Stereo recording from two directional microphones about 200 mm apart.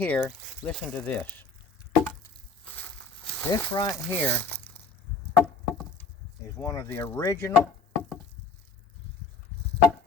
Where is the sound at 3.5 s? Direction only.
20° left (ahead or behind).